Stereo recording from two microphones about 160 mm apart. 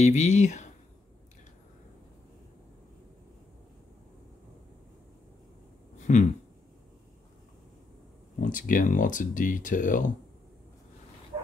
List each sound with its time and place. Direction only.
0.0 s speech: 45° left (ahead or behind)
5.9 s a sound: 50° left (ahead or behind)
8.4 s speech: 55° left (ahead or behind)